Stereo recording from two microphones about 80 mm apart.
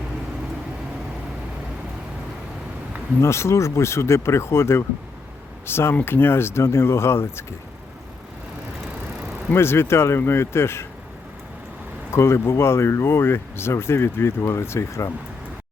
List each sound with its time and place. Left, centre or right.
3.2 s speech: left
9.5 s speech: left
12.1 s speech: left